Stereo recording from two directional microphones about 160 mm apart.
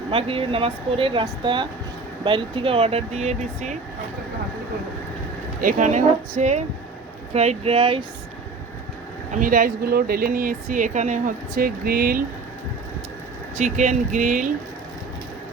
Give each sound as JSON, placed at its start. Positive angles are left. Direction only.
{"t": 0.1, "sound": "speech", "side_deg": -35}
{"t": 5.5, "sound": "speech", "side_deg": -55}
{"t": 9.3, "sound": "speech", "side_deg": -60}
{"t": 13.6, "sound": "speech", "side_deg": -50}